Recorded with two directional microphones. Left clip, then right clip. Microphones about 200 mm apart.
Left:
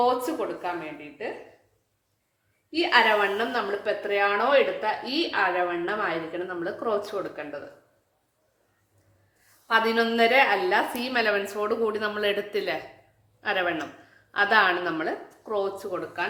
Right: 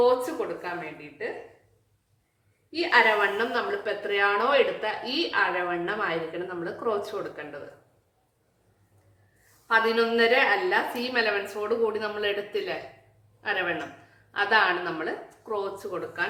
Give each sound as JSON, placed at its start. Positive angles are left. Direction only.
{"t": 2.7, "sound": "a woman's voice", "side_deg": 25}
{"t": 9.6, "sound": "a woman's voice", "side_deg": 30}